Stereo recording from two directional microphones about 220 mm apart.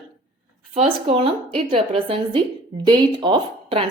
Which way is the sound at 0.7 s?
25° right (ahead or behind).